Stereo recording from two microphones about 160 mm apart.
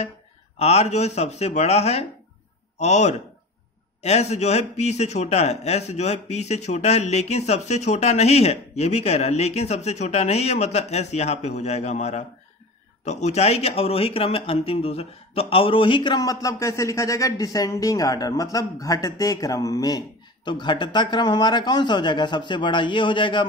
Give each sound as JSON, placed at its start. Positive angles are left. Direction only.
{"t": 0.6, "sound": "a man's voice", "side_deg": 40}